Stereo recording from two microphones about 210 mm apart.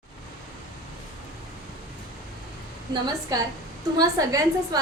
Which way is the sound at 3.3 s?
15° right (ahead or behind).